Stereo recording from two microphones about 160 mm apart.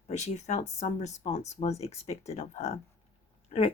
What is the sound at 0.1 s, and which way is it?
Speech, 45° left (ahead or behind).